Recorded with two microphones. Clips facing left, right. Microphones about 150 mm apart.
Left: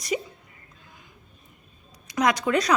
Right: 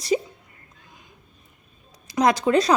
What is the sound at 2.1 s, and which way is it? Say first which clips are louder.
Speech: right 4 dB; 30° right (ahead or behind).